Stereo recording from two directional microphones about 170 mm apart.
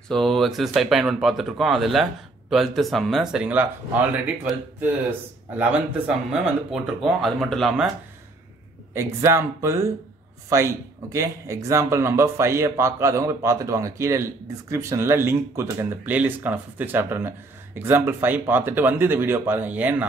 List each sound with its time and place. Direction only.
0.1 s speech: centre (ahead or behind)
5.6 s speech: 5° right (ahead or behind)
8.9 s a man's voice: 15° right (ahead or behind)